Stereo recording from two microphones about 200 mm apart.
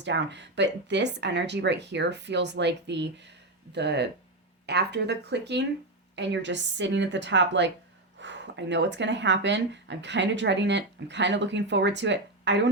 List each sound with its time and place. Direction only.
0.0 s speech: 60° right (ahead or behind)